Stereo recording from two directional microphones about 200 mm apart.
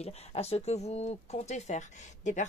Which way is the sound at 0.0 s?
30° left (ahead or behind).